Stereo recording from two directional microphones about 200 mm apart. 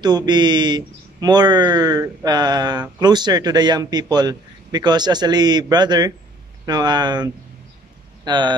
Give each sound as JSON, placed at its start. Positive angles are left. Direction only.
{"t": 0.0, "sound": "a man's voice", "side_deg": -20}
{"t": 8.3, "sound": "a man's voice", "side_deg": -20}